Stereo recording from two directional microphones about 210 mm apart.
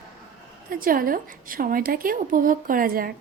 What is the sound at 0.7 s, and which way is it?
A woman's voice, 40° right (ahead or behind).